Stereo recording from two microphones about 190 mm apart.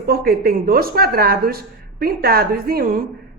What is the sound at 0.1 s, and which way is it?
Speech, 55° right (ahead or behind).